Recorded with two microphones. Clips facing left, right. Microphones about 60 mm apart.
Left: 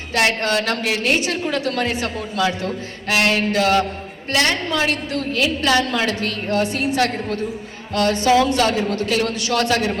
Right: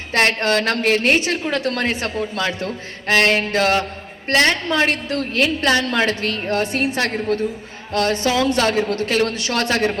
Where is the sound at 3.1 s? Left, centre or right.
Right.